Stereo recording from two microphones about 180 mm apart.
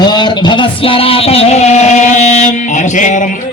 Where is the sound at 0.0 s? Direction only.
25° left (ahead or behind).